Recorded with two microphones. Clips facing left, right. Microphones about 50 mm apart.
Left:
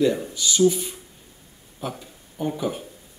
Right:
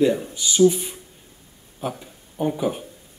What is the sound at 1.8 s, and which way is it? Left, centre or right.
Speech, centre.